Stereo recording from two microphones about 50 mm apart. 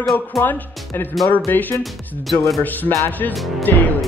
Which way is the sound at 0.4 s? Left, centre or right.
Left.